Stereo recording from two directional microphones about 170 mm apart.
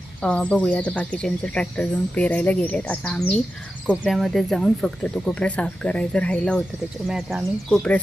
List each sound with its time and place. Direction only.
0.2 s speech: 5° left (ahead or behind)